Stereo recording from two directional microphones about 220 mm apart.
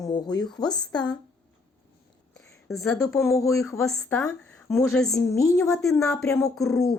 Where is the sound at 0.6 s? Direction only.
5° left (ahead or behind).